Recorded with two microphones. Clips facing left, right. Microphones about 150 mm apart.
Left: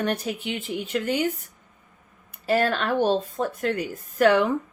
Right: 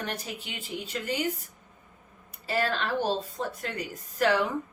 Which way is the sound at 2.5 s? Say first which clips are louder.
Left 6 dB; 55° left (ahead or behind).